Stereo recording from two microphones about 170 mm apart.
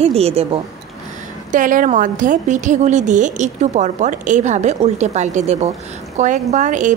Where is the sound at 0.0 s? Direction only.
35° right (ahead or behind).